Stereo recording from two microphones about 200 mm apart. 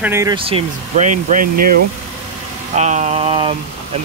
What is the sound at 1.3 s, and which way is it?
Speech, 45° right (ahead or behind).